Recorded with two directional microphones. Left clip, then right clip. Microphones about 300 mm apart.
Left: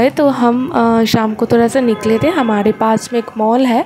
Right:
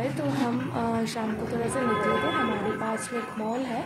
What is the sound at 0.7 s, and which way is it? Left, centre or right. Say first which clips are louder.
Speech: left 17 dB; left.